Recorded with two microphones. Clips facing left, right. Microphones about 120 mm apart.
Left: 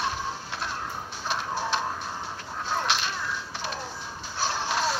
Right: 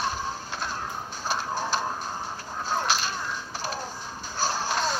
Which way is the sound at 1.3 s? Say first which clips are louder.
Even; centre (ahead or behind).